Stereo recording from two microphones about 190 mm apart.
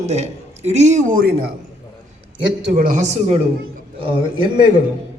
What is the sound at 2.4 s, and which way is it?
Speech, 60° right (ahead or behind).